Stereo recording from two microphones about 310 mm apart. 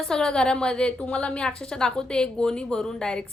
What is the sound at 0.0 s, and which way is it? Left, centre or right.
A woman's voice, centre.